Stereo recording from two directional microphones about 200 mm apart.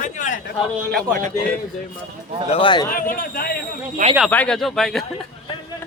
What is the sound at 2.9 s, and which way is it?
Speech, 45° left (ahead or behind).